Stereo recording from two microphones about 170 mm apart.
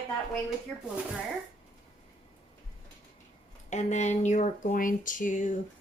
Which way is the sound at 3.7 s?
45° left (ahead or behind).